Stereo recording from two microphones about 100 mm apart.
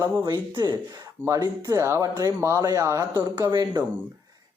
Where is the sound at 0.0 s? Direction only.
40° right (ahead or behind).